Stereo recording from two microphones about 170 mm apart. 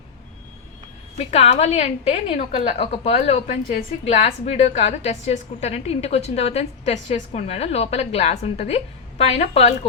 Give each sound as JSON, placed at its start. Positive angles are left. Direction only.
{"t": 1.2, "sound": "a woman's voice", "side_deg": 35}